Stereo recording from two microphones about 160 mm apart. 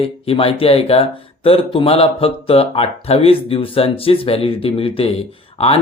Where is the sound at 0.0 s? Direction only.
35° left (ahead or behind).